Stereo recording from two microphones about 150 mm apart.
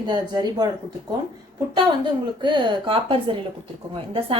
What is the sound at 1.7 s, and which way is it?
A woman's voice, 30° right (ahead or behind).